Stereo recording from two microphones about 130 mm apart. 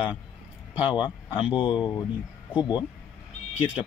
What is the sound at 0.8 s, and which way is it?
Speech, 40° left (ahead or behind).